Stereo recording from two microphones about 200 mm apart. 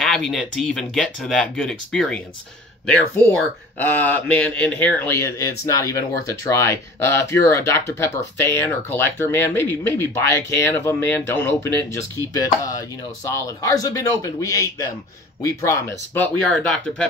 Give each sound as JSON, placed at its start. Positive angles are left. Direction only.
{"t": 0.0, "sound": "speech", "side_deg": 0}